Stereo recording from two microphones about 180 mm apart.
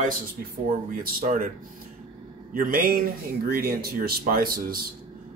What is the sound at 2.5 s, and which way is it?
Speech, 50° right (ahead or behind).